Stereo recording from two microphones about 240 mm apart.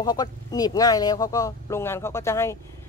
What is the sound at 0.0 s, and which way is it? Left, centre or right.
Speech, centre.